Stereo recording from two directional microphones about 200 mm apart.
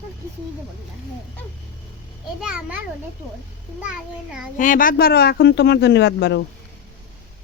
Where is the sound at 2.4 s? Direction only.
5° right (ahead or behind).